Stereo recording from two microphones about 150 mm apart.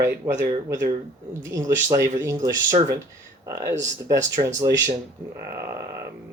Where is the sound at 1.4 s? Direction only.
20° right (ahead or behind).